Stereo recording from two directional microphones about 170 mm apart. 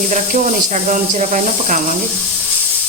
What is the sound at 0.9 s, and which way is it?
Speech, 50° right (ahead or behind).